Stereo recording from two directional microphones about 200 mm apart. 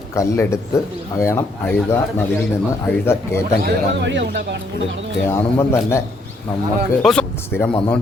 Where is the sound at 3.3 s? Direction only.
15° left (ahead or behind).